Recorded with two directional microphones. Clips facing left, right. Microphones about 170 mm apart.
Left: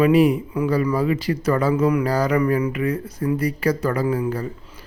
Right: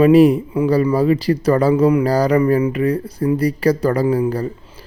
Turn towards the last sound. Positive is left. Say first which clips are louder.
# right 5 dB
turn(degrees=-35)  # may be behind; listen again after turning